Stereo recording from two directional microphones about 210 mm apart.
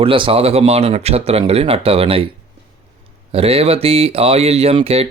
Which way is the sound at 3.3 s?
30° right (ahead or behind).